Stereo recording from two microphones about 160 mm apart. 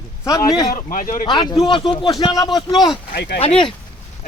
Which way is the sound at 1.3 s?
25° left (ahead or behind).